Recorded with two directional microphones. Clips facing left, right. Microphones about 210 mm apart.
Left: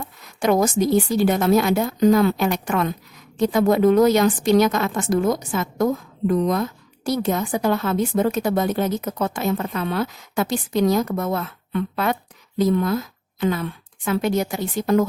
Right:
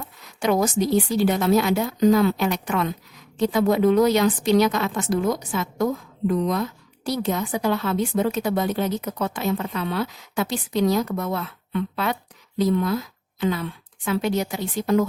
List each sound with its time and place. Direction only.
0.3 s a woman's voice: 50° left (ahead or behind)